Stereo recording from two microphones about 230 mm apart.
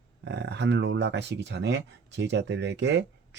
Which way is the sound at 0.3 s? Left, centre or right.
Right.